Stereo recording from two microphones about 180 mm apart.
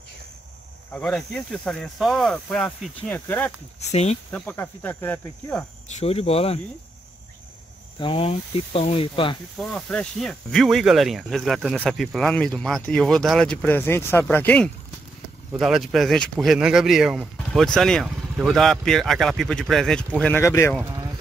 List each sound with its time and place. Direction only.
0.9 s speech: 5° left (ahead or behind)
3.8 s speech: 35° left (ahead or behind)
4.3 s cricket: 10° left (ahead or behind)
5.9 s speech: 35° left (ahead or behind)
8.0 s speech: 30° left (ahead or behind)
9.6 s speech: 5° left (ahead or behind)
20.2 s cricket: 10° left (ahead or behind)